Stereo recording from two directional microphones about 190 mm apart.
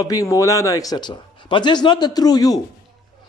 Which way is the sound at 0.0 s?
15° left (ahead or behind).